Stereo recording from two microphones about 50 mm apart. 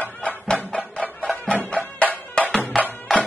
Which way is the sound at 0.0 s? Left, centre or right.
Left.